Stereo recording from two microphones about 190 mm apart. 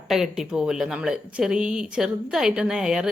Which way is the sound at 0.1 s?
Centre (ahead or behind).